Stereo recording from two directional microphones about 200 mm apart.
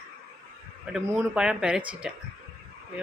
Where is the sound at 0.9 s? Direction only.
5° right (ahead or behind).